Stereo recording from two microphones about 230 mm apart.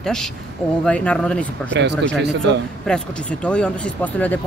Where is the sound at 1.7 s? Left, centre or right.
Right.